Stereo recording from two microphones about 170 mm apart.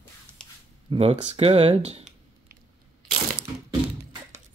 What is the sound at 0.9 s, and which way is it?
Speech, 35° right (ahead or behind).